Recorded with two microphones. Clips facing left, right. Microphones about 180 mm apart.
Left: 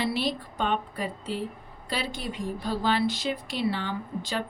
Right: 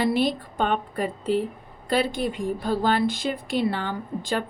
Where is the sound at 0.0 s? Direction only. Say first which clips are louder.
Right 6 dB; 50° right (ahead or behind).